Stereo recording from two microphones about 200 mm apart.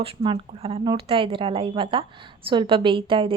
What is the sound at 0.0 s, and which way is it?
A woman's voice, 25° right (ahead or behind).